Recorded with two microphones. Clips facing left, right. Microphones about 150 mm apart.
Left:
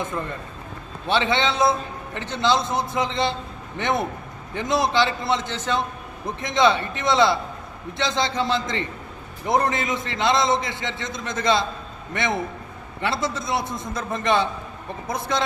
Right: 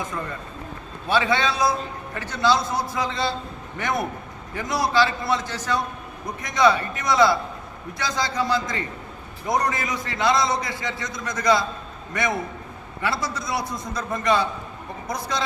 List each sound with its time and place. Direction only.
1.0 s a man's voice: 25° left (ahead or behind)